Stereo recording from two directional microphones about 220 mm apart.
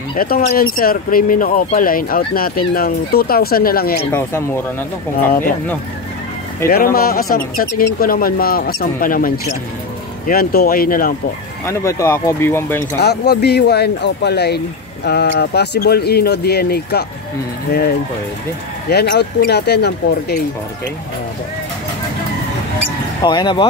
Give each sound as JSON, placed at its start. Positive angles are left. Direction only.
{"t": 0.2, "sound": "speech", "side_deg": 40}
{"t": 4.1, "sound": "speech", "side_deg": 10}
{"t": 6.7, "sound": "speech", "side_deg": 40}
{"t": 11.6, "sound": "speech", "side_deg": 15}
{"t": 13.0, "sound": "speech", "side_deg": 50}
{"t": 23.2, "sound": "speech", "side_deg": 20}